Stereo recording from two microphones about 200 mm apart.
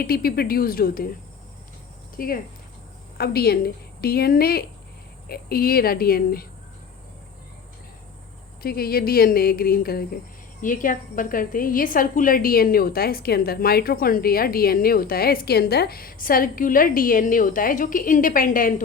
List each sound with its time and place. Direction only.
0.0 s a woman's voice: 50° left (ahead or behind)
2.1 s a woman's voice: 45° left (ahead or behind)
8.6 s a woman's voice: 50° left (ahead or behind)